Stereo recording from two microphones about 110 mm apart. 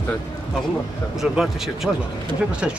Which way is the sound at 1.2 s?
5° right (ahead or behind).